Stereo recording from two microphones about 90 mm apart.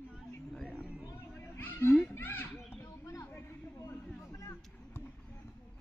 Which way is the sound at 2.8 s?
35° left (ahead or behind).